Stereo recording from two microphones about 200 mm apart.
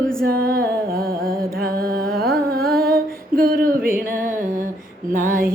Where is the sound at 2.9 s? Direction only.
45° right (ahead or behind).